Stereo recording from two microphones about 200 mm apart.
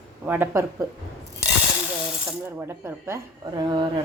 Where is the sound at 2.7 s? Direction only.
10° right (ahead or behind).